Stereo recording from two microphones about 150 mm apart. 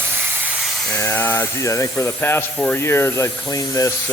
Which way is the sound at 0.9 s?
15° left (ahead or behind).